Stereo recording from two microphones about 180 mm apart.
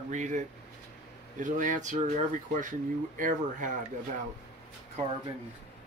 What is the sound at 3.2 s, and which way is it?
Speech, 45° right (ahead or behind).